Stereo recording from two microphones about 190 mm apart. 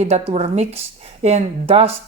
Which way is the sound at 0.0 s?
30° right (ahead or behind).